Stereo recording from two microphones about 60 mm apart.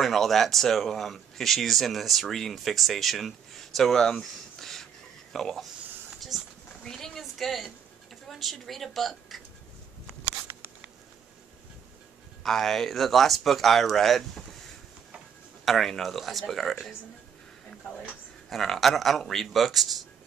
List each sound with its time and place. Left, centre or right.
0.0 s speech: centre
6.3 s a sound: centre
6.8 s a sound: centre
8.3 s speech: centre
12.4 s speech: centre
15.6 s speech: centre
18.5 s speech: centre